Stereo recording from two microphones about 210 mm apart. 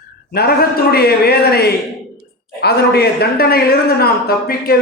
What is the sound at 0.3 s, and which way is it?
A man's voice, 50° left (ahead or behind).